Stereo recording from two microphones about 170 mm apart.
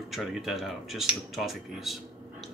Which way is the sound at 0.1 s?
Centre (ahead or behind).